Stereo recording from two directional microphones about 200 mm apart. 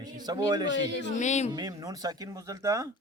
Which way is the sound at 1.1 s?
35° left (ahead or behind).